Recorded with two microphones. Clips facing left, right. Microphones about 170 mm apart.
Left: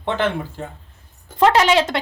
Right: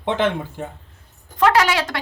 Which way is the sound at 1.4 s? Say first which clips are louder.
Left 2 dB; 25° left (ahead or behind).